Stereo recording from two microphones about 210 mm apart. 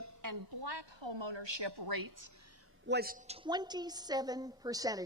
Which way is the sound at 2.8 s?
50° right (ahead or behind).